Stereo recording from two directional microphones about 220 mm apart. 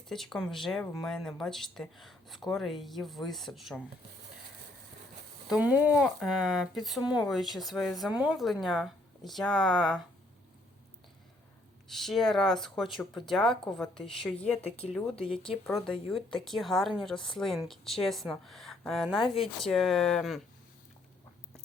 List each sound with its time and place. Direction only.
0.1 s speech: centre (ahead or behind)
5.5 s speech: 5° right (ahead or behind)
11.9 s speech: centre (ahead or behind)
14.5 s a woman's voice: 25° left (ahead or behind)
15.6 s speech: centre (ahead or behind)